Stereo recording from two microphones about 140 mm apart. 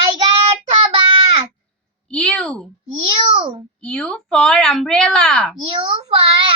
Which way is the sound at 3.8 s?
5° left (ahead or behind).